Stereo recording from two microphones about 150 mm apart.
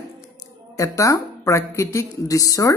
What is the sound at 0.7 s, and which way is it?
Speech, 20° left (ahead or behind).